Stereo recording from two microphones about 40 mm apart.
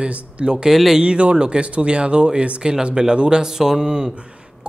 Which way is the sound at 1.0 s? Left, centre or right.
Right.